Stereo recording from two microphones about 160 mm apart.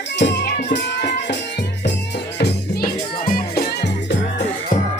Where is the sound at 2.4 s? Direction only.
65° left (ahead or behind).